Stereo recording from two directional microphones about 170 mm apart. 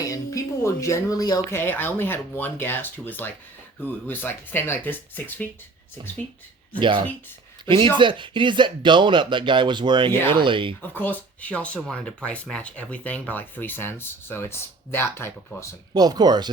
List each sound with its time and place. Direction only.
0.0 s speech: 20° left (ahead or behind)
6.7 s speech: 30° right (ahead or behind)
10.8 s speech: 10° left (ahead or behind)
16.0 s speech: 25° right (ahead or behind)